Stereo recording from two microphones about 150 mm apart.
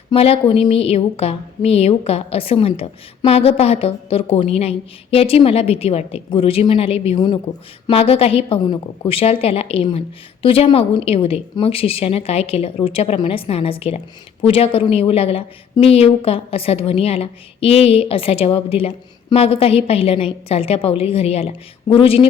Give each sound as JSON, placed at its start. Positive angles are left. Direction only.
{"t": 0.1, "sound": "a woman's voice", "side_deg": 40}